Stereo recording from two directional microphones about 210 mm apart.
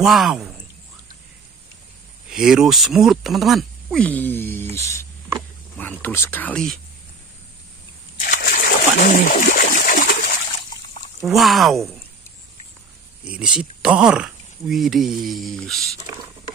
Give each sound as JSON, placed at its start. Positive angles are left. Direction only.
{"t": 0.0, "sound": "a man's voice", "side_deg": 0}
{"t": 2.2, "sound": "speech", "side_deg": -5}
{"t": 6.0, "sound": "speech", "side_deg": 10}
{"t": 8.2, "sound": "splash", "side_deg": 45}
{"t": 11.2, "sound": "speech", "side_deg": 0}
{"t": 13.2, "sound": "speech", "side_deg": -5}